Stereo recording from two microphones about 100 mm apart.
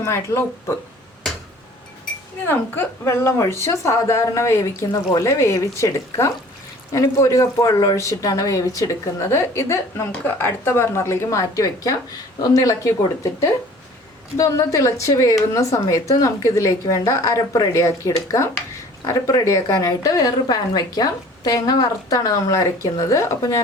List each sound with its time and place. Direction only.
0.0 s a woman's voice: 25° left (ahead or behind)
2.5 s a woman's voice: 25° left (ahead or behind)